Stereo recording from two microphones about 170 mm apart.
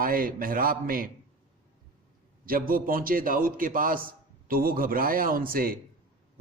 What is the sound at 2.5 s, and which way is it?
A man's voice, 55° right (ahead or behind).